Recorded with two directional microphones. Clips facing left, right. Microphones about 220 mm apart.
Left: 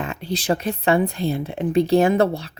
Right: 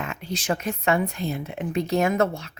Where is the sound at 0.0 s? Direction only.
30° left (ahead or behind).